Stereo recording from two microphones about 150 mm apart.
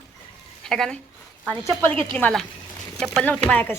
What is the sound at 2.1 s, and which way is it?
Speech, 5° left (ahead or behind).